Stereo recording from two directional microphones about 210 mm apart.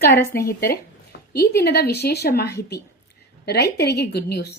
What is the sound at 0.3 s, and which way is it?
A woman's voice, 45° left (ahead or behind).